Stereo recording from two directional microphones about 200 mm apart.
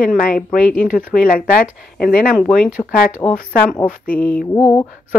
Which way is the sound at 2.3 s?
5° left (ahead or behind).